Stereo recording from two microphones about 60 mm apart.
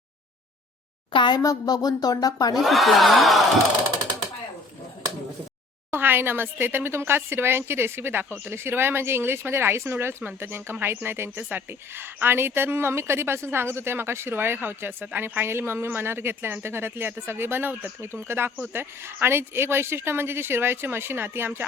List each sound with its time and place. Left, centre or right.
1.4 s a woman's voice: left
2.6 s speech: centre
5.9 s a woman's voice: right